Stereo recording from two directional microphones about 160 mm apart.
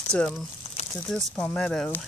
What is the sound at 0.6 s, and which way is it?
Crumpling, 40° left (ahead or behind).